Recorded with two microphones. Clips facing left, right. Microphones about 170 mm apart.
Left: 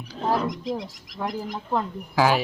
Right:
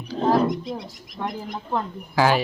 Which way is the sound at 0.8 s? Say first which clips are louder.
Even; 90° left.